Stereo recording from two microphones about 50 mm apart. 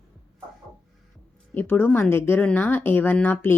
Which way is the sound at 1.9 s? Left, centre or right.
Left.